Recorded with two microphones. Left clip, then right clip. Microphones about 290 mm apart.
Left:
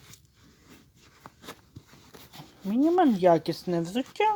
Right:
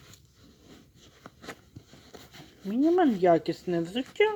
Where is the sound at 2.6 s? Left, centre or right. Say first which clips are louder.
Left 1 dB; left.